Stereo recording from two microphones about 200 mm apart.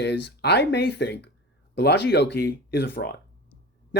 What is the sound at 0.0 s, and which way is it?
Speech, 55° left (ahead or behind).